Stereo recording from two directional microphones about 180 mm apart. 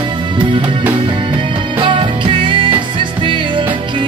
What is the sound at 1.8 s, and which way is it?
Music, 25° right (ahead or behind).